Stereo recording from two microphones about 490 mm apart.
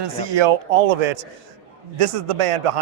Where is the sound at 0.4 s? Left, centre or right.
Right.